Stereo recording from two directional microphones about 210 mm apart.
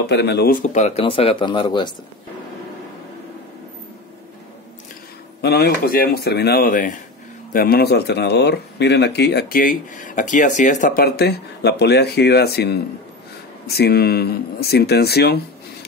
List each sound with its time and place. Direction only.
0.0 s speech: 55° left (ahead or behind); by 2.0 s 20° left (ahead or behind)
5.4 s speech: 50° left (ahead or behind)
13.7 s speech: 50° left (ahead or behind)